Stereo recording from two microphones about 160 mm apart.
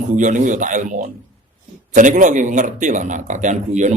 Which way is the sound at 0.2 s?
50° right (ahead or behind).